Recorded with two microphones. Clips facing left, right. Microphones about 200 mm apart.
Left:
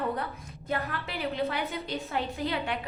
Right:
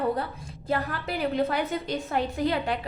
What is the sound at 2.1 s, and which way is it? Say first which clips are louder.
Speech: right 5 dB; 45° right (ahead or behind).